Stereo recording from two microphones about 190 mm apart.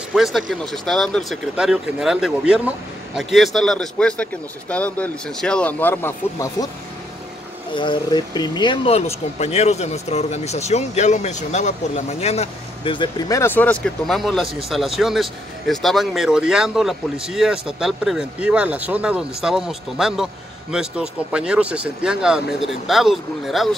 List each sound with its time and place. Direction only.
0.1 s a man's voice: centre (ahead or behind); by 6.7 s 15° left (ahead or behind)
7.7 s speech: 25° left (ahead or behind)
13.4 s speech: 10° left (ahead or behind)